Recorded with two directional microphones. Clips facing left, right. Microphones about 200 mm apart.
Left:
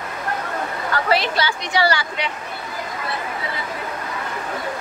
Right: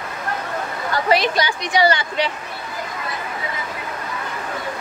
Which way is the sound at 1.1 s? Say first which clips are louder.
Right 3 dB; 15° right (ahead or behind).